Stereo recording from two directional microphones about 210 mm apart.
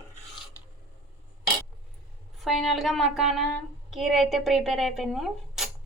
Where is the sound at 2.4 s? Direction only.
Centre (ahead or behind).